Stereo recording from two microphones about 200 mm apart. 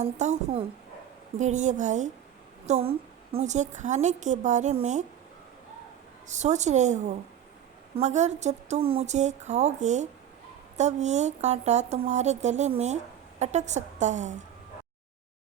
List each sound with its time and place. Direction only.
0.0 s speech: 35° right (ahead or behind)
6.2 s speech: 35° right (ahead or behind)